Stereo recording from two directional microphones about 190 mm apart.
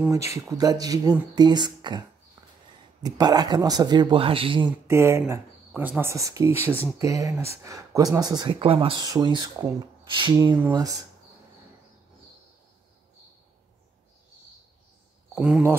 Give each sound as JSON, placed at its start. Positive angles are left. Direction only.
{"t": 0.1, "sound": "speech", "side_deg": -15}
{"t": 4.6, "sound": "speech", "side_deg": -15}
{"t": 15.3, "sound": "speech", "side_deg": -5}